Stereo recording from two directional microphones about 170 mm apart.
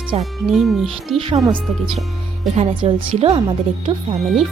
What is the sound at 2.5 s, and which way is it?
Speech, 35° right (ahead or behind).